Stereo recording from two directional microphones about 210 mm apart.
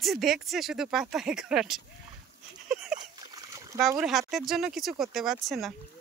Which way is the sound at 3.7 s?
Centre (ahead or behind).